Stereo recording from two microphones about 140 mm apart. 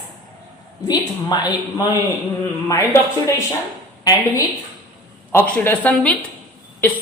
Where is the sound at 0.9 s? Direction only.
30° left (ahead or behind).